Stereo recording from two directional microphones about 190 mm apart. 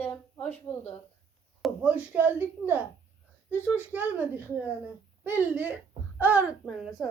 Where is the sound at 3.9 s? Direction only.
10° right (ahead or behind).